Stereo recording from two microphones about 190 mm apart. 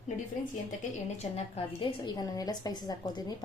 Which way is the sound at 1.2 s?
30° left (ahead or behind).